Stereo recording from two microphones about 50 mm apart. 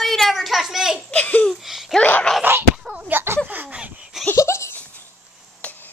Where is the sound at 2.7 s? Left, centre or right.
Centre.